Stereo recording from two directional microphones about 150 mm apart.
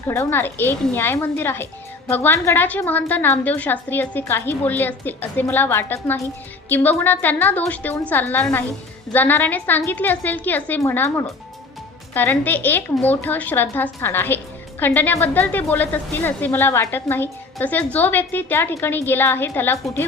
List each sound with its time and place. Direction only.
0.1 s a woman's voice: 15° left (ahead or behind)